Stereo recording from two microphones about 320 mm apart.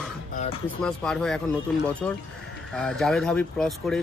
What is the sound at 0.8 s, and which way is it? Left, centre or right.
Speech, centre.